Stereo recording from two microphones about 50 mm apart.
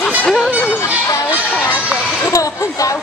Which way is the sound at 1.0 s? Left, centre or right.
Left.